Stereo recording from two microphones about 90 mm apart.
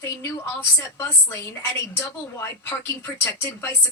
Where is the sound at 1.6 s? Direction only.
30° left (ahead or behind).